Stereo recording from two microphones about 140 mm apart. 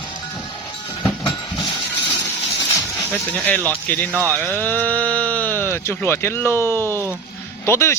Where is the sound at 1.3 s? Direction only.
Centre (ahead or behind).